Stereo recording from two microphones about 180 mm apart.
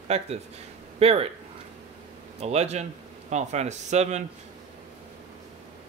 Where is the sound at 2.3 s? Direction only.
35° right (ahead or behind).